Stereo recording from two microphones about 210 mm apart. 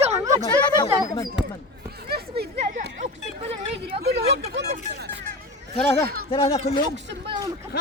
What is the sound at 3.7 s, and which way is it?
Speech, 50° right (ahead or behind).